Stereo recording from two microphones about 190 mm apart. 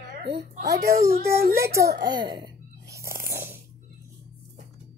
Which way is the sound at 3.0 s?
50° right (ahead or behind).